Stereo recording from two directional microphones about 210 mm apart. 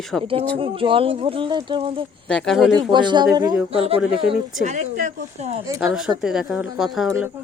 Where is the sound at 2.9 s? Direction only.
20° right (ahead or behind).